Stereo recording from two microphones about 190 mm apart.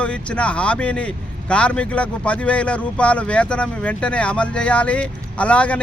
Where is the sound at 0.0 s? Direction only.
5° left (ahead or behind).